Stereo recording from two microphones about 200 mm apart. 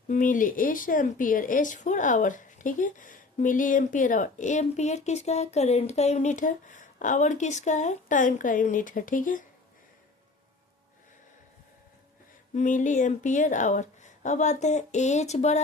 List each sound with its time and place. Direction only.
0.1 s speech: 40° left (ahead or behind)
12.5 s speech: 40° left (ahead or behind)